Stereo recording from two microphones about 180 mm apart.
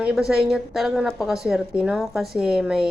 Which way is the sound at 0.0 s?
5° right (ahead or behind).